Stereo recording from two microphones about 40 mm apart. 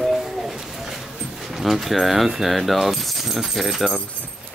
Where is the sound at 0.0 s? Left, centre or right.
Centre.